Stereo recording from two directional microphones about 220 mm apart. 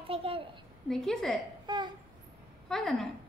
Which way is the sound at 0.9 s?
Centre (ahead or behind).